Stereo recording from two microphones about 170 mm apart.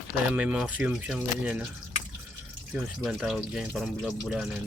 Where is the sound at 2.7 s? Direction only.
Centre (ahead or behind).